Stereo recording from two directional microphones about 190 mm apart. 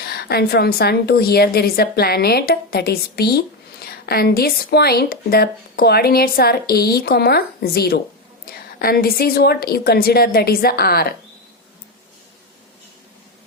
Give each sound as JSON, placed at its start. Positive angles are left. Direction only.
{"t": 0.0, "sound": "a woman's voice", "side_deg": 55}